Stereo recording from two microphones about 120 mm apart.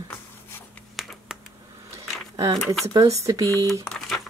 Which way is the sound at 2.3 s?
25° right (ahead or behind).